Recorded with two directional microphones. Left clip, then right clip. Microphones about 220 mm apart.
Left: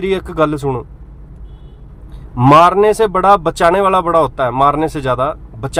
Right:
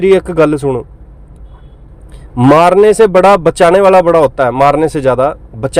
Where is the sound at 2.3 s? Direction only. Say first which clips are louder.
Right 2 dB; 15° right (ahead or behind).